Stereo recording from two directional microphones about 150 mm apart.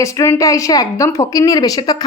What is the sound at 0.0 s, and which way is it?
A woman's voice, 20° left (ahead or behind).